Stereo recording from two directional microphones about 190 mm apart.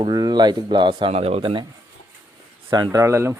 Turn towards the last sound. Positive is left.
turn(degrees=-15)  # may be behind; listen again after turning